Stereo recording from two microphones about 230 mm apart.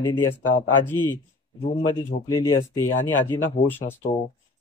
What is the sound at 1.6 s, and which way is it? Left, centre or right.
Speech, left.